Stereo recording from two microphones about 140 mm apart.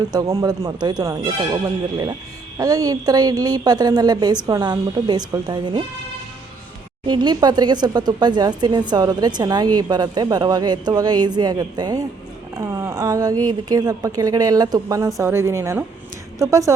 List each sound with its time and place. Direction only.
0.1 s speech: 25° right (ahead or behind)
7.1 s speech: 30° right (ahead or behind)